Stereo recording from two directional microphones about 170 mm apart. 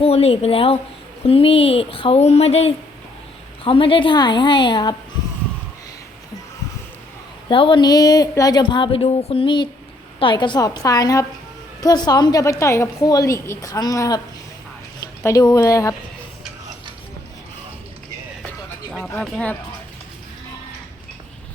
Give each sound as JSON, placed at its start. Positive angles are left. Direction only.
{"t": 0.0, "sound": "a woman's voice", "side_deg": 35}
{"t": 7.4, "sound": "a woman's voice", "side_deg": 30}
{"t": 15.2, "sound": "a woman's voice", "side_deg": 20}
{"t": 18.9, "sound": "speech", "side_deg": 10}